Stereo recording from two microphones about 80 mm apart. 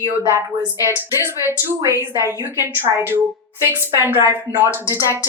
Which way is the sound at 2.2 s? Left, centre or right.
Right.